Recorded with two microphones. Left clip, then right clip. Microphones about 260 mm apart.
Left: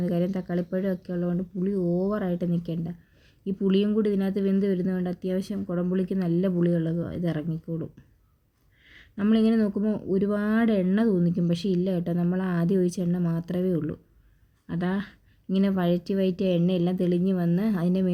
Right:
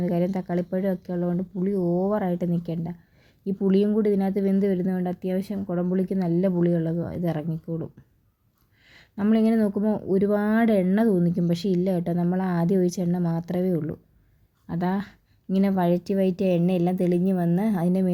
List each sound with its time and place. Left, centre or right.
0.0 s speech: centre